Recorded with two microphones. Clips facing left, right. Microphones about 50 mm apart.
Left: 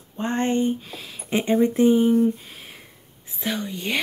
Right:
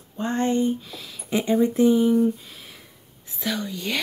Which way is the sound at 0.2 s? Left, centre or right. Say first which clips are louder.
Even; left.